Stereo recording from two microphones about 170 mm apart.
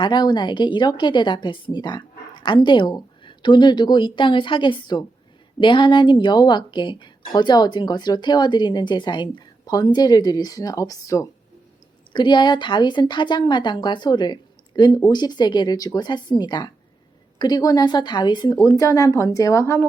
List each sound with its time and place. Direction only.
0.0 s a woman's voice: 25° left (ahead or behind)